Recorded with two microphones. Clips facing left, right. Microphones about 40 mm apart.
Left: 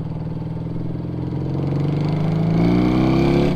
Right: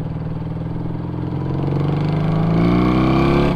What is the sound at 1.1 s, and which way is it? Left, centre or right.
Vehicle, right.